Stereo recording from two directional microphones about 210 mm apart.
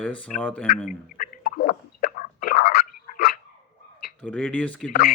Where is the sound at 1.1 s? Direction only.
40° left (ahead or behind).